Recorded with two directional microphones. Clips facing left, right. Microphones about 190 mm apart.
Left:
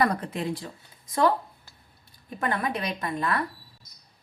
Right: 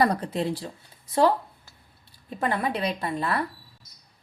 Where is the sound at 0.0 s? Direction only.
30° right (ahead or behind).